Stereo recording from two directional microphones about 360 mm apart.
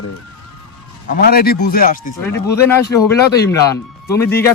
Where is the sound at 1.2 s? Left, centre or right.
Left.